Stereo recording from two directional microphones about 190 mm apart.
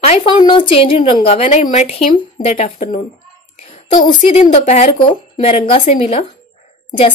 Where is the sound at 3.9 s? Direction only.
25° left (ahead or behind).